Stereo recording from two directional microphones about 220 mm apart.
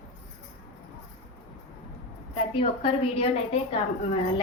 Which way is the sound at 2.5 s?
25° left (ahead or behind).